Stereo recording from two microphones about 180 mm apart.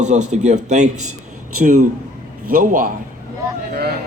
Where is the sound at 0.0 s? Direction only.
40° right (ahead or behind).